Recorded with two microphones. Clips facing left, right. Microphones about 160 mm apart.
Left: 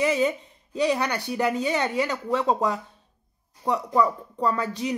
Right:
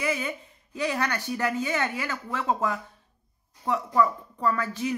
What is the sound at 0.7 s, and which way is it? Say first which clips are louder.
Speech: left 4 dB; 15° left (ahead or behind).